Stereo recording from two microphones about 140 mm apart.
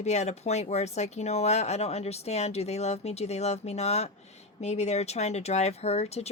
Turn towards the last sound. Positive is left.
turn(degrees=50)  # may be behind; listen again after turning